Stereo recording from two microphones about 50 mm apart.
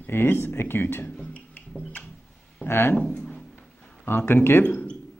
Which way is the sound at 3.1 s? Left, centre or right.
Centre.